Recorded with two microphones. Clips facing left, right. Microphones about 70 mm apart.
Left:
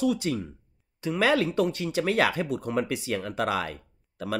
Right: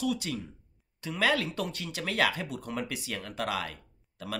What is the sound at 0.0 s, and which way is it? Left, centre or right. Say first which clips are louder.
Speech: left 6 dB; left.